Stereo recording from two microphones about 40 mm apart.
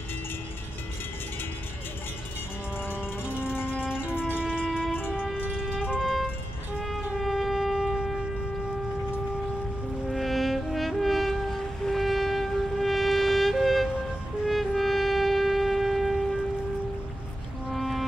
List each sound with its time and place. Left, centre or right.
2.8 s music: left
4.4 s music: right
6.8 s shofar: centre
10.0 s music: centre
17.7 s music: centre